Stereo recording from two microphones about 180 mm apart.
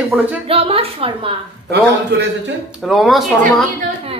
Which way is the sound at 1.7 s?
75° right (ahead or behind).